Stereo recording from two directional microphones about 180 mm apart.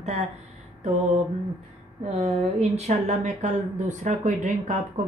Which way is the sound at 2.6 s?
35° right (ahead or behind).